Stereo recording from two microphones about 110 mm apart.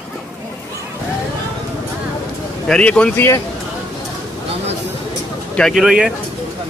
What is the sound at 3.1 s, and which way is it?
Speech, 25° left (ahead or behind).